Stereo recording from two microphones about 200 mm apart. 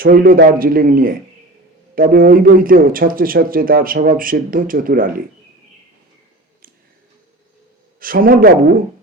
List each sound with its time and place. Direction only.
0.0 s speech: 45° right (ahead or behind)
7.9 s speech: 45° right (ahead or behind)